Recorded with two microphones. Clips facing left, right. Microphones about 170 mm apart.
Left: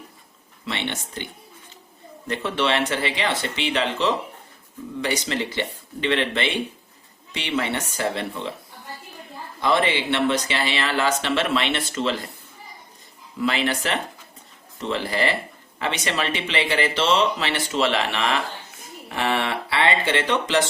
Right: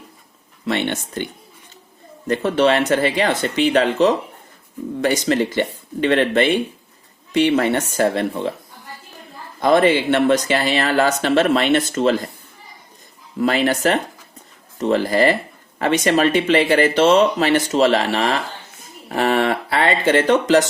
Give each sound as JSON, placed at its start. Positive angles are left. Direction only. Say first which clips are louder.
{"t": 0.6, "sound": "speech", "louder": "right 8 dB", "side_deg": -45}
{"t": 2.2, "sound": "speech", "louder": "right 8 dB", "side_deg": -45}
{"t": 9.6, "sound": "speech", "louder": "right 7 dB", "side_deg": -45}
{"t": 13.4, "sound": "speech", "louder": "right 6 dB", "side_deg": -45}